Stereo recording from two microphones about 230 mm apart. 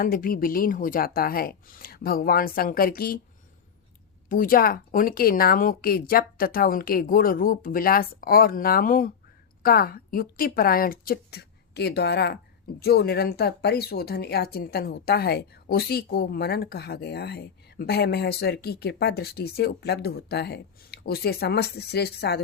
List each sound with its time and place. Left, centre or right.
0.0 s speech: left
4.3 s a woman's voice: left